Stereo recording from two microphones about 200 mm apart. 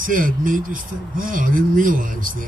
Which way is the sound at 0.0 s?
45° right (ahead or behind).